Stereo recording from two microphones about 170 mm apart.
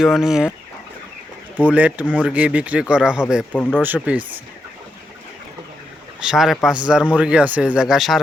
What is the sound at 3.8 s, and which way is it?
Speech, 10° right (ahead or behind).